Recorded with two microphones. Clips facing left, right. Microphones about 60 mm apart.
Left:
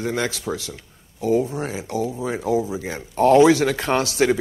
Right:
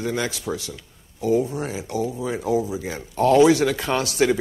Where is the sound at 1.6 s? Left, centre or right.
Left.